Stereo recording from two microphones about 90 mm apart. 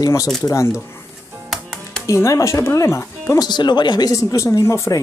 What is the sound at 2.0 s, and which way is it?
Speech, 35° left (ahead or behind).